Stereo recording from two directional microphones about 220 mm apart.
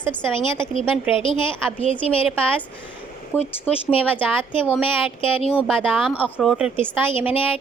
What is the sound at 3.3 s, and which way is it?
Speech, 10° left (ahead or behind).